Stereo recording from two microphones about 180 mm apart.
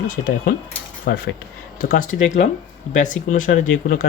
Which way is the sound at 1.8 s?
45° left (ahead or behind).